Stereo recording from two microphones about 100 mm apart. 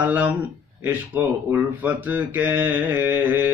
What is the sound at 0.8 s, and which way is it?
Speech, 20° right (ahead or behind).